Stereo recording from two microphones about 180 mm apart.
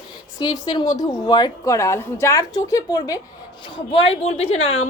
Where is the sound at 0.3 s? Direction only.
20° left (ahead or behind).